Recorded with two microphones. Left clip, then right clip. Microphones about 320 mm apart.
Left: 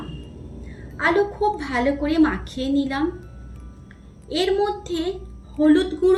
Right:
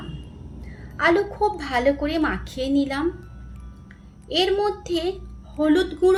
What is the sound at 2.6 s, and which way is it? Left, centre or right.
Speech, right.